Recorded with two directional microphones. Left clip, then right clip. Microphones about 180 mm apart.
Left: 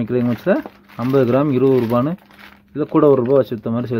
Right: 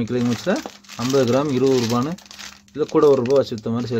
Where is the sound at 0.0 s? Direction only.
30° left (ahead or behind).